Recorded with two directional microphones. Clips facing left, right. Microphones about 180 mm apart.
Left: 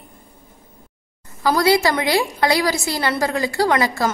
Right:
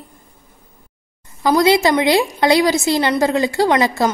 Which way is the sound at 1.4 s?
20° right (ahead or behind).